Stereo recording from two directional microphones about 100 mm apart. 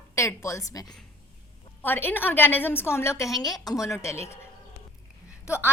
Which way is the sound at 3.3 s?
40° left (ahead or behind).